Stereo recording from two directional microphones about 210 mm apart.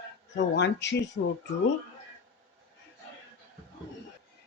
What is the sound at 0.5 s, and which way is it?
Speech, 55° left (ahead or behind).